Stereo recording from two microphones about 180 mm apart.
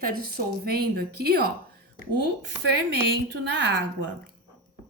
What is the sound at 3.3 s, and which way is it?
Speech, 80° right.